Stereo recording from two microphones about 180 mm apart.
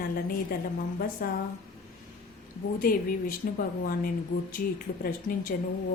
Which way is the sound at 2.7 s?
50° left (ahead or behind).